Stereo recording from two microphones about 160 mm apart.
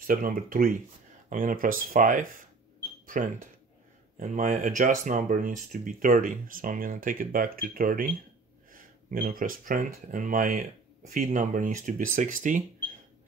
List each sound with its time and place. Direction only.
0.0 s speech: 60° right (ahead or behind)